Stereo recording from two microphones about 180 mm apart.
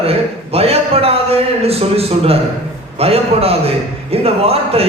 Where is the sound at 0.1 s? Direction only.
35° right (ahead or behind).